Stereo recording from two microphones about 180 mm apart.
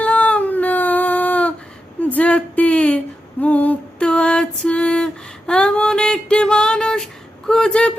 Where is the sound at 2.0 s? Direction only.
10° left (ahead or behind).